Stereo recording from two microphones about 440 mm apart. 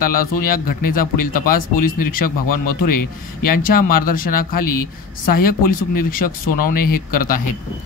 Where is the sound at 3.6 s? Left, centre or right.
Centre.